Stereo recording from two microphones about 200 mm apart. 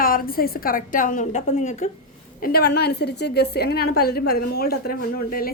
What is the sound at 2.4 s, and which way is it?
A woman's voice, 50° left (ahead or behind).